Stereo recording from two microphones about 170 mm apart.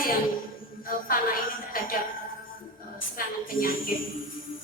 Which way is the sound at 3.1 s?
55° left (ahead or behind).